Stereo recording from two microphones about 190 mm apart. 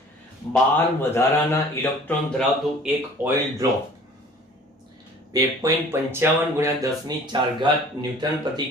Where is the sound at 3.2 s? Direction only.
10° right (ahead or behind).